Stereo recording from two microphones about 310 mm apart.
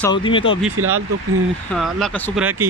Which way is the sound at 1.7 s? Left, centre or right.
Centre.